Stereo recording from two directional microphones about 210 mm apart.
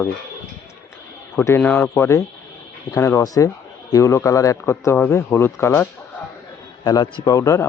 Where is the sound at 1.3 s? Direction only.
10° left (ahead or behind).